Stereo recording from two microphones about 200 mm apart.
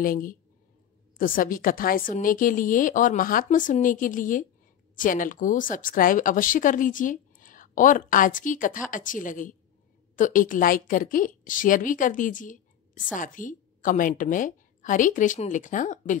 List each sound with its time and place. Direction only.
0.0 s a woman's voice: 45° left (ahead or behind)